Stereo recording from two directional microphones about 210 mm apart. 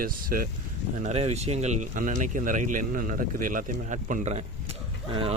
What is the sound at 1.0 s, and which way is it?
Speech, 30° right (ahead or behind).